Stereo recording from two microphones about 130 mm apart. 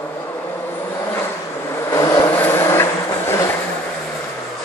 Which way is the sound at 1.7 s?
25° left (ahead or behind).